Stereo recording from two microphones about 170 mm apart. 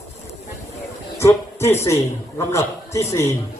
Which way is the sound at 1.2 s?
15° left (ahead or behind).